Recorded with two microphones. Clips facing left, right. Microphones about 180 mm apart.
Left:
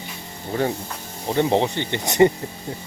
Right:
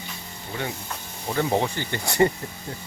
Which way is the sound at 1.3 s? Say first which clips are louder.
Left 4 dB; 25° left (ahead or behind).